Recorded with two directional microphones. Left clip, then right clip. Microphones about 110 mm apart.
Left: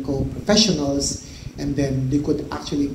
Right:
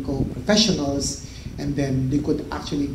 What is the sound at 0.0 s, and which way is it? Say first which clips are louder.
A man's voice: left 2 dB; 45° left (ahead or behind).